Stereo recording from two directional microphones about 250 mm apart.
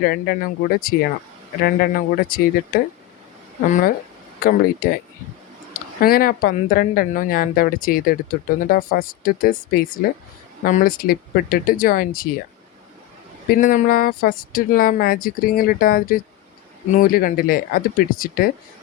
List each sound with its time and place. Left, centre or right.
0.0 s speech: left
4.4 s speech: left
13.5 s speech: left